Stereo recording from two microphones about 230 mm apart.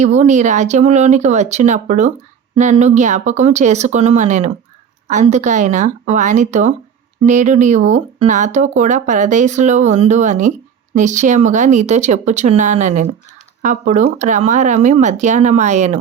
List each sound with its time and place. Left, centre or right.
0.0 s speech: right